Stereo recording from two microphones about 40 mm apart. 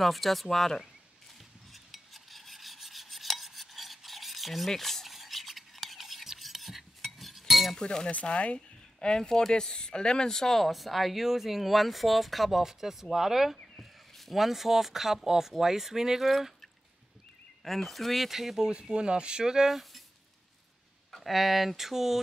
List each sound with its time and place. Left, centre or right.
0.0 s speech: centre
1.7 s filing: centre
7.7 s speech: centre
8.1 s speech: left; by 16.5 s centre
17.6 s speech: centre
18.7 s speech: right
19.7 s a sound: centre
21.1 s speech: centre